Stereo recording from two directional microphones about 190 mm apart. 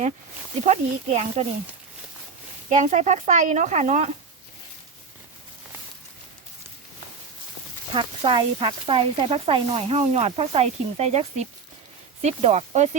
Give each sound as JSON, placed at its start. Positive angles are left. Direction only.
{"t": 0.6, "sound": "speech", "side_deg": -40}
{"t": 2.6, "sound": "speech", "side_deg": -40}
{"t": 7.9, "sound": "speech", "side_deg": -25}